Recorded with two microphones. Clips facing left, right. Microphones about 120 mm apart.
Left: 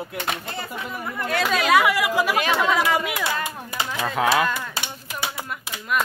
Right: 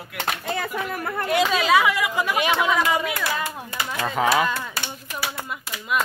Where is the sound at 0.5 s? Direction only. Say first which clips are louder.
Right 4 dB; 65° right (ahead or behind).